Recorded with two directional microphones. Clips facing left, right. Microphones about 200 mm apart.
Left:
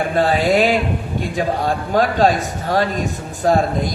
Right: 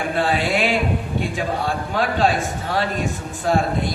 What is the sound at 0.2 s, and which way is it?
Speech, 40° left (ahead or behind).